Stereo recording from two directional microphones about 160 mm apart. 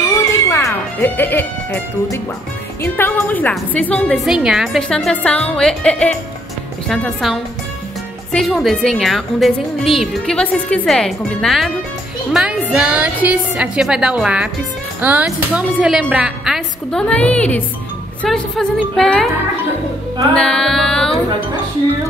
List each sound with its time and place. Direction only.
0.1 s music: 20° left (ahead or behind)
2.8 s a woman's voice: 10° left (ahead or behind)
20.3 s a woman's voice: 5° left (ahead or behind)